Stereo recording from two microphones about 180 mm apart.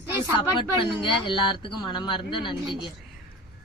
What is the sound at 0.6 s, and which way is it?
Speech, 25° left (ahead or behind).